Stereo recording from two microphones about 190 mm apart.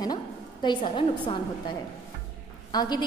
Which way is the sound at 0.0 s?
20° left (ahead or behind).